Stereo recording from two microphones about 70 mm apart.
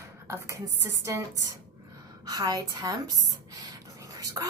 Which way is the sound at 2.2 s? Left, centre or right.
Right.